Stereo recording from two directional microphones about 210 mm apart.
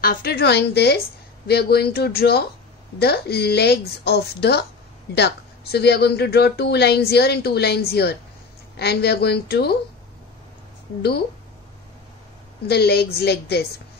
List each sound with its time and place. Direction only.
0.0 s a woman's voice: 45° left (ahead or behind)
11.0 s a woman's voice: 50° left (ahead or behind)
12.6 s a woman's voice: 50° left (ahead or behind)